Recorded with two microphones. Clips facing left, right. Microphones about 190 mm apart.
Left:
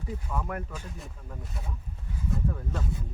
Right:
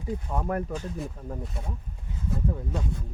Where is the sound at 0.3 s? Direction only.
35° right (ahead or behind).